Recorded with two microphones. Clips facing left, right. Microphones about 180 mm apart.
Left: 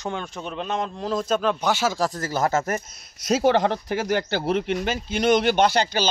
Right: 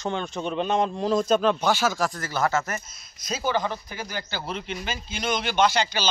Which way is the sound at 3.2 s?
75° left (ahead or behind).